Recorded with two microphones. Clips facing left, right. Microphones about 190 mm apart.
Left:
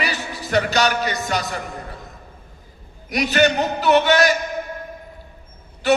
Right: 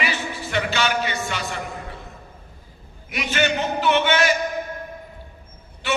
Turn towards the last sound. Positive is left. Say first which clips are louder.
# left 7 dB
turn(degrees=40)  # may be behind; listen again after turning